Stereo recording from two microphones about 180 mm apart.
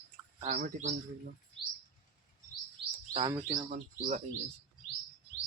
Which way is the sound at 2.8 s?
30° right (ahead or behind).